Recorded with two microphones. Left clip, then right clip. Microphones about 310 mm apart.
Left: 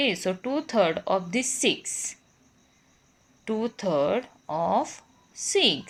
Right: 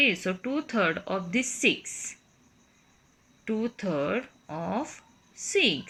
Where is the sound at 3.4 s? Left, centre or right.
Centre.